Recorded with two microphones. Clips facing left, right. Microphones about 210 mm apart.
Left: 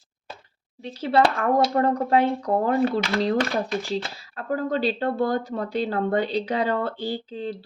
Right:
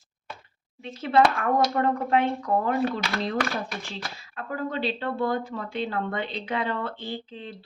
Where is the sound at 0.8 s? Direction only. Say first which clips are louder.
Left 1 dB; 35° left (ahead or behind).